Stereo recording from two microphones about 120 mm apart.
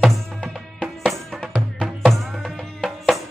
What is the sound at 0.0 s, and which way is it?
Music, centre (ahead or behind).